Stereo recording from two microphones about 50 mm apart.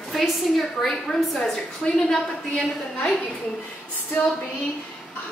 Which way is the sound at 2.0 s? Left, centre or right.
Left.